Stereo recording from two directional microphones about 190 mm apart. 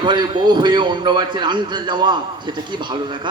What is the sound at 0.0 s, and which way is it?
A man's voice, 25° right (ahead or behind).